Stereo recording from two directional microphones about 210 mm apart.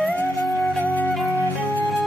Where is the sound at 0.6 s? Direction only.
10° left (ahead or behind).